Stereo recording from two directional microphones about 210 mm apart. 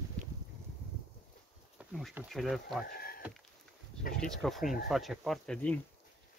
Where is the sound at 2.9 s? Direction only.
45° left (ahead or behind).